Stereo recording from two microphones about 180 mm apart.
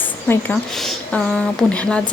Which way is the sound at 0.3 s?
5° left (ahead or behind).